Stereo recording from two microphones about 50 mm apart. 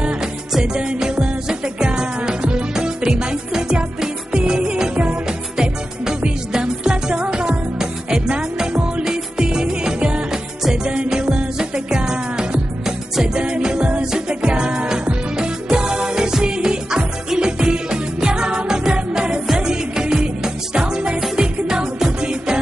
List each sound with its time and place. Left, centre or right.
0.7 s music: centre